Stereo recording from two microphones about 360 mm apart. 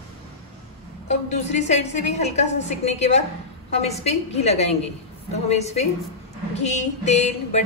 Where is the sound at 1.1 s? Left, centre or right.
Centre.